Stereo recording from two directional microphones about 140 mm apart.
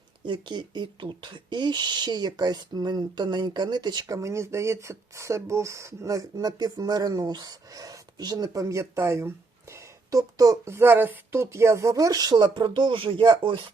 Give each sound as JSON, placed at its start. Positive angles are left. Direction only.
{"t": 0.3, "sound": "speech", "side_deg": -35}